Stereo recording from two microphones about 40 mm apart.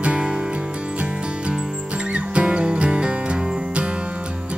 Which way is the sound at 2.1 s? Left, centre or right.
Right.